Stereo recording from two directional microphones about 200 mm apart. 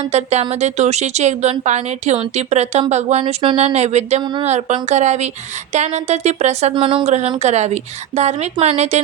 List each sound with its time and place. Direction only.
0.0 s speech: 30° right (ahead or behind)
4.2 s speech: 20° right (ahead or behind)
4.4 s speech: 35° right (ahead or behind)